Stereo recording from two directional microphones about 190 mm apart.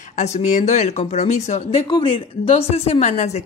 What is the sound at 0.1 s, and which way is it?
A woman's voice, 40° left (ahead or behind).